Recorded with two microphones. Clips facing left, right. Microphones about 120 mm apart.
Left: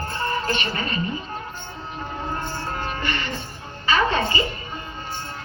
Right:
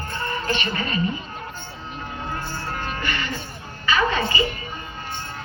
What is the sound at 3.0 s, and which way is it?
Music, 30° left (ahead or behind).